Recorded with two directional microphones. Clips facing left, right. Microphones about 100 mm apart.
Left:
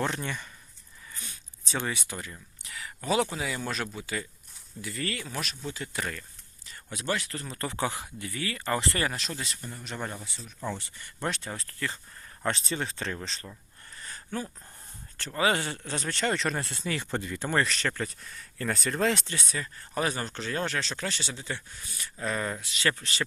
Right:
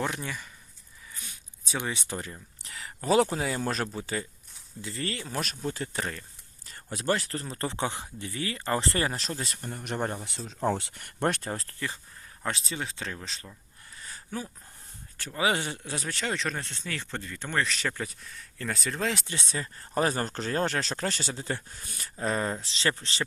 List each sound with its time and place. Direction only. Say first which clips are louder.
0.0 s speech: left 1 dB; 5° right (ahead or behind)
1.1 s a sound: left 1 dB; 15° right (ahead or behind)
2.0 s speech: right 3 dB; 35° right (ahead or behind)
5.4 s speech: right 3 dB; 45° right (ahead or behind)
6.7 s speech: right 3 dB; 40° right (ahead or behind)
10.2 s speech: right 6 dB; 90° right
10.7 s speech: right 7 dB; 75° right (ahead or behind); by 11.7 s 40° right (ahead or behind)
12.4 s speech: left 3 dB; centre (ahead or behind)
13.9 s a sound: left 1 dB; 5° right (ahead or behind)
15.2 s speech: left 1 dB; 10° right (ahead or behind)
19.2 s speech: even; 25° right (ahead or behind); by 22.1 s 45° right (ahead or behind)
22.2 s speech: right 2 dB; 35° right (ahead or behind)